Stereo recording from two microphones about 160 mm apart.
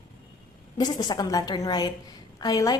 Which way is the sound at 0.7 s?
25° left (ahead or behind).